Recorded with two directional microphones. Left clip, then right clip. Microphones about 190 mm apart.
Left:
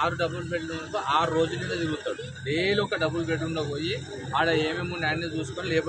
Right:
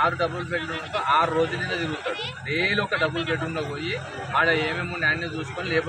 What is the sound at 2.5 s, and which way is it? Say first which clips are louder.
A man's voice: right 2 dB; 35° left (ahead or behind).